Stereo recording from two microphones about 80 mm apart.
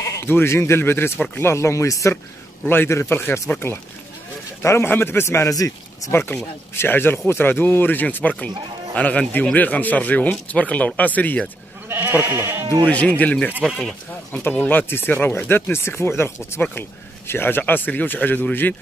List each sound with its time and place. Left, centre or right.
0.3 s a man's voice: left
2.6 s a man's voice: left
5.5 s speech: left
6.1 s speech: left
11.9 s goat: right
13.0 s speech: centre
13.7 s speech: centre
14.3 s speech: centre